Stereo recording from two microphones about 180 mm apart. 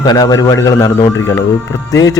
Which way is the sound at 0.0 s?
20° left (ahead or behind).